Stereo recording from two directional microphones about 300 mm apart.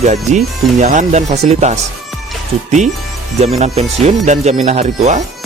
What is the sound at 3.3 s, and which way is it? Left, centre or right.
Speech, right.